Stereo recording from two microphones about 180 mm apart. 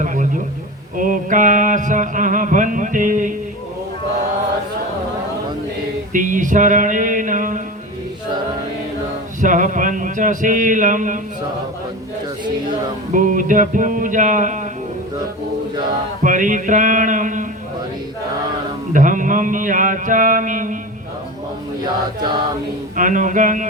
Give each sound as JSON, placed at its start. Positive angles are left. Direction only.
{"t": 0.0, "sound": "a sound", "side_deg": -45}
{"t": 0.9, "sound": "music", "side_deg": -45}
{"t": 6.1, "sound": "music", "side_deg": -45}
{"t": 9.4, "sound": "music", "side_deg": -45}
{"t": 13.1, "sound": "music", "side_deg": -45}
{"t": 16.2, "sound": "music", "side_deg": -45}
{"t": 18.9, "sound": "music", "side_deg": -45}
{"t": 23.0, "sound": "music", "side_deg": -45}